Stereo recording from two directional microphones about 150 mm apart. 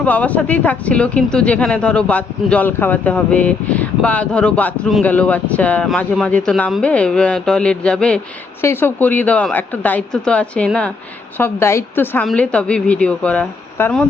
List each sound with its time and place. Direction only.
0.0 s speech: 10° left (ahead or behind)
12.2 s speech: 5° left (ahead or behind)